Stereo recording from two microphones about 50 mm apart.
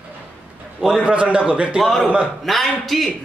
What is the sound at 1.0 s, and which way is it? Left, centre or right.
Speech, right.